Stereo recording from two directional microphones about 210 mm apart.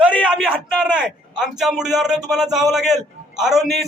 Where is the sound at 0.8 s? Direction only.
5° right (ahead or behind).